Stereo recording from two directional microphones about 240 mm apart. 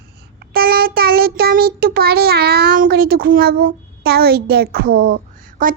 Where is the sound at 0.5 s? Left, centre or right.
Right.